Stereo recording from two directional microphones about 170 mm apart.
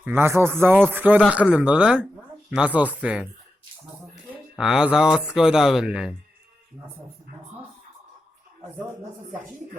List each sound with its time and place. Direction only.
0.0 s speech: 15° right (ahead or behind)